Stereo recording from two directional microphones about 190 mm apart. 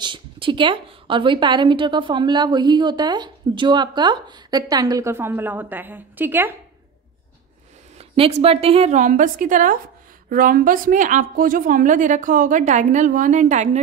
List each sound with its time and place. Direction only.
0.0 s a woman's voice: 25° right (ahead or behind); by 6.5 s 10° right (ahead or behind)
8.2 s a woman's voice: 30° right (ahead or behind)